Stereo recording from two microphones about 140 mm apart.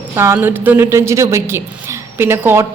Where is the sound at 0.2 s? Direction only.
15° right (ahead or behind).